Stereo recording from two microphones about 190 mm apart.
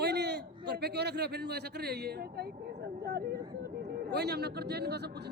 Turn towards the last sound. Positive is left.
turn(degrees=-60)  # may be behind; listen again after turning